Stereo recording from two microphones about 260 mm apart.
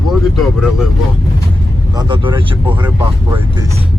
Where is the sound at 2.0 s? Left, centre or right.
Centre.